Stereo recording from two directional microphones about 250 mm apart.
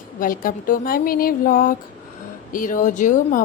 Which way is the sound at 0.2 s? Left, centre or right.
Left.